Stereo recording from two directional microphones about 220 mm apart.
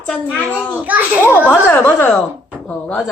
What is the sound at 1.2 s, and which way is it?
A woman's voice, 10° left (ahead or behind).